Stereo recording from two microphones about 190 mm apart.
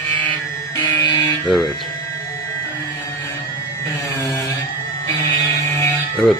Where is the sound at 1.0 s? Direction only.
20° left (ahead or behind).